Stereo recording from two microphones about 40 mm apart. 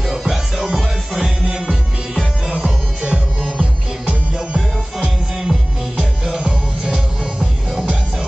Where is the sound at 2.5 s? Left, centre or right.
Right.